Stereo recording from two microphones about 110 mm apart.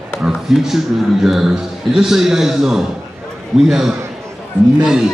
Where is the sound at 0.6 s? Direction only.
5° right (ahead or behind).